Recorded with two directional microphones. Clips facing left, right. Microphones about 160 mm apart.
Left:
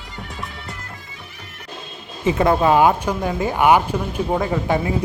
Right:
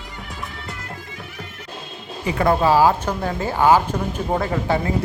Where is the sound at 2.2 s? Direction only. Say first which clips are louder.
Left 2 dB; 20° left (ahead or behind).